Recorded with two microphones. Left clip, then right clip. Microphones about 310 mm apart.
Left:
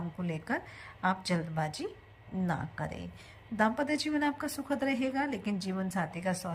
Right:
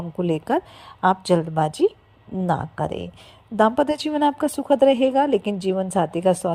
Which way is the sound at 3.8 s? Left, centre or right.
Centre.